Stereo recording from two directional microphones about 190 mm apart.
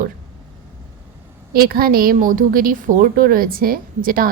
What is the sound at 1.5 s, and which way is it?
A woman's voice, 50° right (ahead or behind).